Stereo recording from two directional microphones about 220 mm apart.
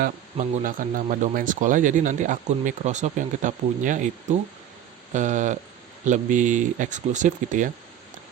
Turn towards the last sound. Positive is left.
turn(degrees=-35)  # may be behind; listen again after turning